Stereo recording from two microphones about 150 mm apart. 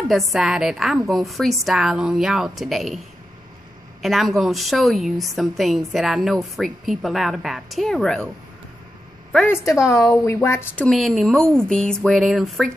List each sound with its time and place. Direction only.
0.1 s a woman's voice: centre (ahead or behind)
4.0 s a woman's voice: centre (ahead or behind)
9.5 s a woman's voice: 20° left (ahead or behind)
10.9 s a woman's voice: centre (ahead or behind)